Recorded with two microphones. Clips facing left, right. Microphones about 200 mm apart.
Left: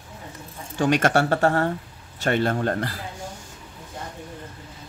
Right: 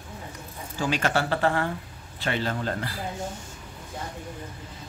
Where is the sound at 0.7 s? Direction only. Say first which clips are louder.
Left 6 dB; 50° left (ahead or behind).